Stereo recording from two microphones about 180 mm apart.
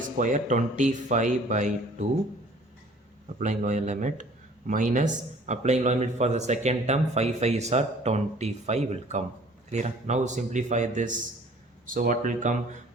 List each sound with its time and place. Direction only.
0.2 s speech: 45° right (ahead or behind)
3.3 s speech: 40° right (ahead or behind)